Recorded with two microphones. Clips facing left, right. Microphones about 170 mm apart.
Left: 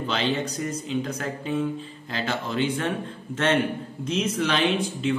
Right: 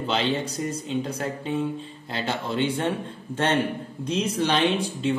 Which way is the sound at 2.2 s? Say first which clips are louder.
Even; 30° right (ahead or behind).